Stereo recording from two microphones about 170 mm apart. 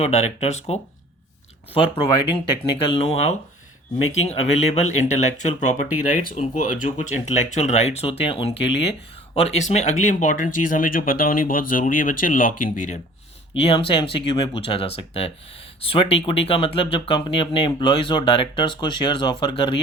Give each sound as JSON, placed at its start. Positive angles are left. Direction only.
{"t": 0.0, "sound": "speech", "side_deg": 40}
{"t": 2.3, "sound": "speech", "side_deg": 30}
{"t": 13.5, "sound": "speech", "side_deg": 30}